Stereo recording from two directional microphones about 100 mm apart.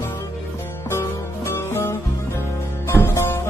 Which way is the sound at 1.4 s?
25° left (ahead or behind).